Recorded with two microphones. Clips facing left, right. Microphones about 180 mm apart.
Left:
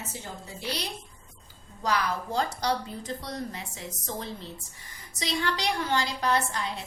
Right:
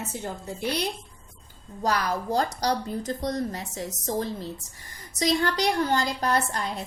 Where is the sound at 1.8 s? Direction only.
45° right (ahead or behind).